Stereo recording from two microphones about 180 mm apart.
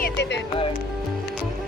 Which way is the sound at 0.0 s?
70° left (ahead or behind).